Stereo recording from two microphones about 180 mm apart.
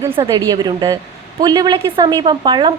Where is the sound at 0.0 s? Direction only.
20° right (ahead or behind).